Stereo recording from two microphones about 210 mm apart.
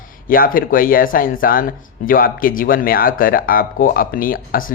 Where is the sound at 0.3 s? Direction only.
40° left (ahead or behind).